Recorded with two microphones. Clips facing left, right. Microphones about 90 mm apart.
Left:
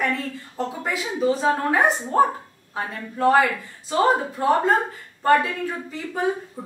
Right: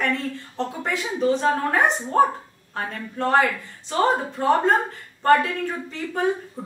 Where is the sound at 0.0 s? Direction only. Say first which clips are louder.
Even; 5° left (ahead or behind).